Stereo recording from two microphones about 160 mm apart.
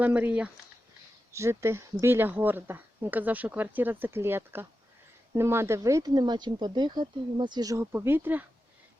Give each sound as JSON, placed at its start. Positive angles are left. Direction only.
{"t": 0.0, "sound": "speech", "side_deg": -10}